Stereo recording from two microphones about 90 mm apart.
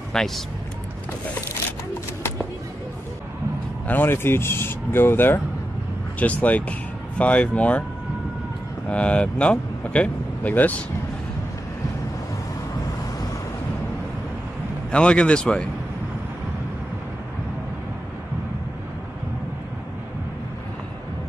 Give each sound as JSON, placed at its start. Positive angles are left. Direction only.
{"t": 0.1, "sound": "speech", "side_deg": 5}
{"t": 3.8, "sound": "speech", "side_deg": 20}
{"t": 8.8, "sound": "speech", "side_deg": 15}
{"t": 14.9, "sound": "speech", "side_deg": 10}